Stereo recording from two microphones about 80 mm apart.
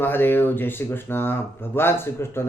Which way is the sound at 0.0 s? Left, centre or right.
Left.